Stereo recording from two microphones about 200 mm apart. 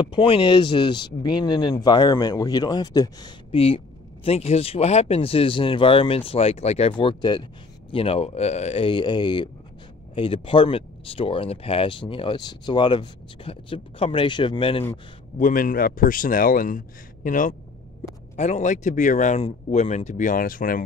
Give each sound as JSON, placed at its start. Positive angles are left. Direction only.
{"t": 0.0, "sound": "speech", "side_deg": 25}
{"t": 15.3, "sound": "a man's voice", "side_deg": 40}